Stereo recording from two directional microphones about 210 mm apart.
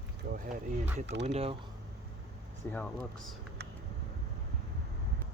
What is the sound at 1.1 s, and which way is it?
Speech, 55° right (ahead or behind).